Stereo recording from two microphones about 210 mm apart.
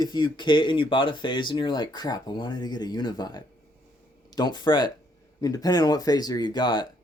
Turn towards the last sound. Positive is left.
turn(degrees=20)  # may be behind; listen again after turning